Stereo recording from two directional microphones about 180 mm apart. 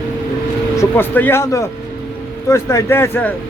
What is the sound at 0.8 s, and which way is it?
Speech, 10° left (ahead or behind).